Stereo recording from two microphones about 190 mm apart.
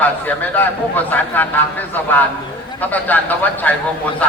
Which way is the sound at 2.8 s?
10° left (ahead or behind).